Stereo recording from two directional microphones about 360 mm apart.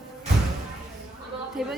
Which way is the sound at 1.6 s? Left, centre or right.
Centre.